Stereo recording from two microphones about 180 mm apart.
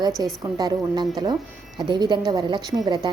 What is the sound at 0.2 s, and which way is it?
A woman's voice, 25° right (ahead or behind).